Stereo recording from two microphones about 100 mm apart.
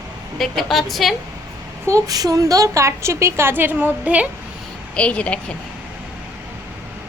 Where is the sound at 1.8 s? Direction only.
35° right (ahead or behind); by 4.2 s 15° right (ahead or behind).